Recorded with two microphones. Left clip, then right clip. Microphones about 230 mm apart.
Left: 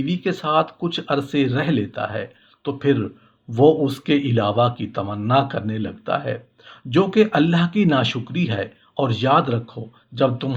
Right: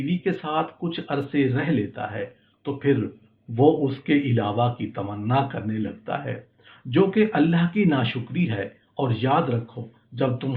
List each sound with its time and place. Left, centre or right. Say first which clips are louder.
0.0 s speech: left 3 dB; left